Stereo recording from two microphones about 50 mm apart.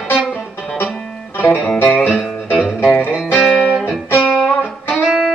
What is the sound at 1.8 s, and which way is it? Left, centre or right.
Music, left.